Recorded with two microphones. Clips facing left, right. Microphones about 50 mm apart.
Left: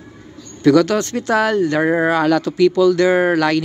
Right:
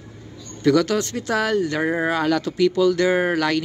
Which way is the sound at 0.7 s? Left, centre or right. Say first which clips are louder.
Left 5 dB; left.